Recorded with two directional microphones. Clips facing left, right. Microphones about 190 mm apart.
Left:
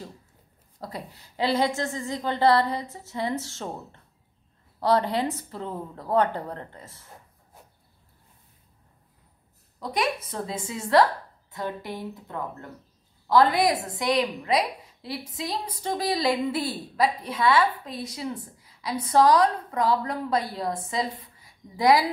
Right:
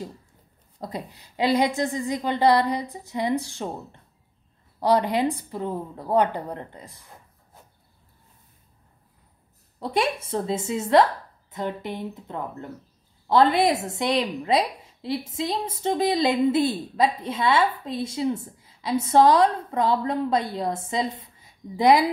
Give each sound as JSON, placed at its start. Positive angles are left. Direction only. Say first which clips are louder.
{"t": 0.7, "sound": "a woman's voice", "louder": "right 3 dB", "side_deg": -20}
{"t": 9.8, "sound": "a woman's voice", "louder": "right 3 dB", "side_deg": -30}